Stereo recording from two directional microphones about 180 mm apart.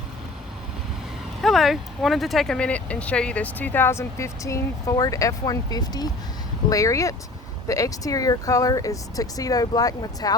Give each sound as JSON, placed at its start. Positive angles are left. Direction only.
{"t": 1.4, "sound": "speech", "side_deg": 0}